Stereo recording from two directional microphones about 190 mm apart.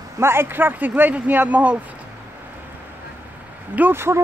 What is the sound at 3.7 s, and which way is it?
Speech, 10° right (ahead or behind).